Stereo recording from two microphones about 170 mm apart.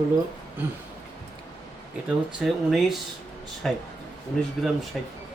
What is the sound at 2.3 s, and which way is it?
Speech, centre (ahead or behind).